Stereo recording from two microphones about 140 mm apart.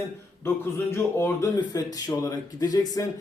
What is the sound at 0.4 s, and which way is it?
A man's voice, 15° left (ahead or behind).